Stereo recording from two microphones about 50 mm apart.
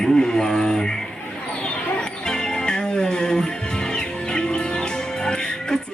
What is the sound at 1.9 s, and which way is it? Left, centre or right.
Music, centre.